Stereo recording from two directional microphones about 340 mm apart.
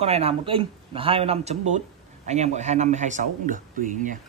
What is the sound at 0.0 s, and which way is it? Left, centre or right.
A man's voice, centre.